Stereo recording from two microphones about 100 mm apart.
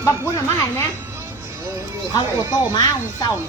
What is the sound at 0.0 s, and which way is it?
Speech, 30° left (ahead or behind).